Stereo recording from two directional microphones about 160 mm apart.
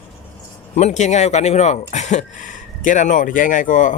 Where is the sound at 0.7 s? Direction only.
45° left (ahead or behind).